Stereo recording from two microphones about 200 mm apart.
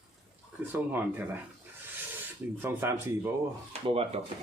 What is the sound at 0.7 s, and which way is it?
Speech, 10° right (ahead or behind).